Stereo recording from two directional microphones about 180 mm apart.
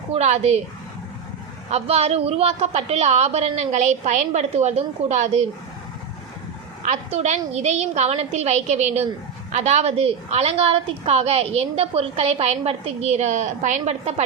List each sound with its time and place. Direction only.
0.1 s a woman's voice: 40° right (ahead or behind)
1.7 s a woman's voice: 35° right (ahead or behind)
6.8 s a woman's voice: 40° right (ahead or behind)